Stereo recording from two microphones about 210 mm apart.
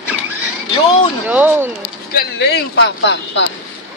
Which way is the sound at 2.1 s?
50° left (ahead or behind).